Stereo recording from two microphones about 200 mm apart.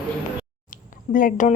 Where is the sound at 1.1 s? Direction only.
45° left (ahead or behind).